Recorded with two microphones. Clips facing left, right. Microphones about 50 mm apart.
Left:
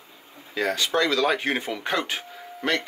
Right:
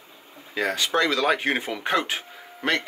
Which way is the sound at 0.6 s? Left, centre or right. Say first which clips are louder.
Even; centre.